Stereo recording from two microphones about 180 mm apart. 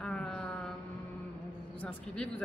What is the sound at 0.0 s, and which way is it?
Mantra, 5° left (ahead or behind).